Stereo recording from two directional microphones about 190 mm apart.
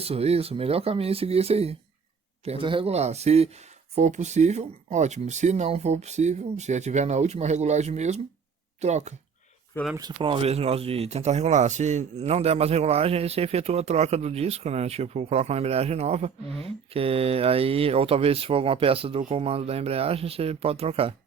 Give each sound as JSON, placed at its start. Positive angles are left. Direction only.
{"t": 0.0, "sound": "speech", "side_deg": -30}
{"t": 9.7, "sound": "speech", "side_deg": 10}
{"t": 10.2, "sound": "speech", "side_deg": -30}